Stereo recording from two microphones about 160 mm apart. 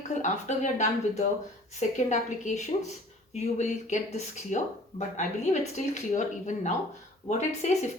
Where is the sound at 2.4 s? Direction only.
45° left (ahead or behind).